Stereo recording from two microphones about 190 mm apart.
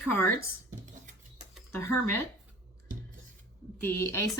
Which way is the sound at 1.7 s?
15° left (ahead or behind).